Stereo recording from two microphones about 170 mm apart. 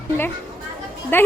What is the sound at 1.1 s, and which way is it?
Speech, 10° left (ahead or behind).